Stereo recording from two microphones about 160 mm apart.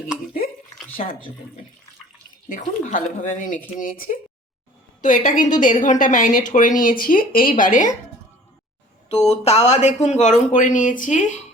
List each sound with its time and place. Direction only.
2.5 s a woman's voice: 55° left (ahead or behind)
9.0 s speech: 40° left (ahead or behind)